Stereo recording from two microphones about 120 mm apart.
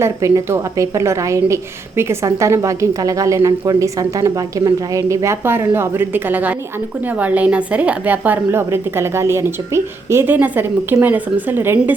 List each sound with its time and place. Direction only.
0.0 s a woman's voice: 25° right (ahead or behind)